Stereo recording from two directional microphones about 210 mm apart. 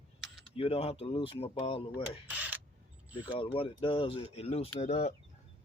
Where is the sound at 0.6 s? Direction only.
30° left (ahead or behind).